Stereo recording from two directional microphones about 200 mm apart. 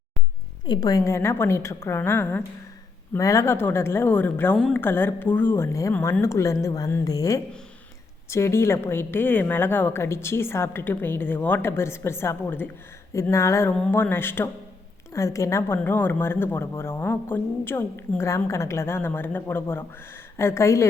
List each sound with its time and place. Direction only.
0.7 s speech: 20° left (ahead or behind)